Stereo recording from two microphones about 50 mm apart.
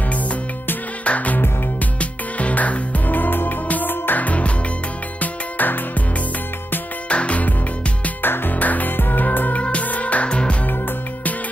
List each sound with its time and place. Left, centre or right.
1.0 s music: left
7.1 s music: left
8.2 s music: left
9.6 s music: left
10.7 s music: left